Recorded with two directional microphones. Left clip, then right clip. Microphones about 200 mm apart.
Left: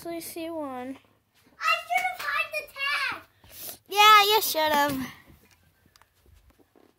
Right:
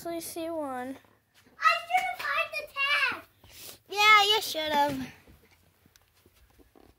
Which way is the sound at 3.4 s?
30° left (ahead or behind).